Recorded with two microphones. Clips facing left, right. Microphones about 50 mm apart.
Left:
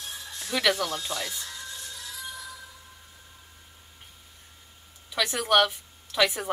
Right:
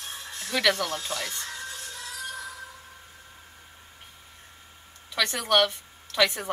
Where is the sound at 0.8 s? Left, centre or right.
Right.